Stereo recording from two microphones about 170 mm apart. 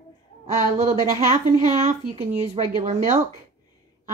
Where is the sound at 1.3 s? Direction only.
40° right (ahead or behind).